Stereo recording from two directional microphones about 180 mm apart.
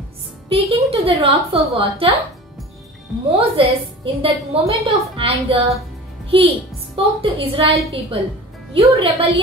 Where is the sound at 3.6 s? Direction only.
30° right (ahead or behind).